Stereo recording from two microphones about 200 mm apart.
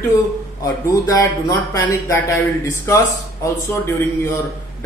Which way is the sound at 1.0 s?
15° left (ahead or behind).